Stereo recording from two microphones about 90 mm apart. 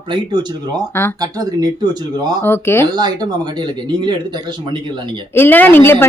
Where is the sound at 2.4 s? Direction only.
25° left (ahead or behind).